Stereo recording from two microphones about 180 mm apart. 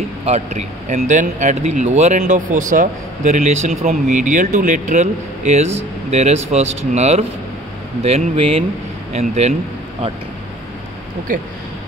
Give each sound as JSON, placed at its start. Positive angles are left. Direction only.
{"t": 0.2, "sound": "speech", "side_deg": -35}